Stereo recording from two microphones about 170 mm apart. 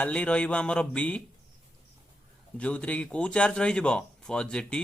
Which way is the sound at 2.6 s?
5° left (ahead or behind).